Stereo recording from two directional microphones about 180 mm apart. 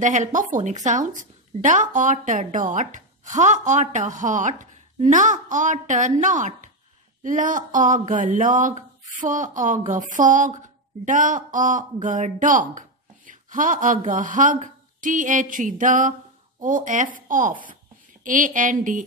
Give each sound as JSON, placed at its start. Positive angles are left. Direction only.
{"t": 0.0, "sound": "a woman's voice", "side_deg": -45}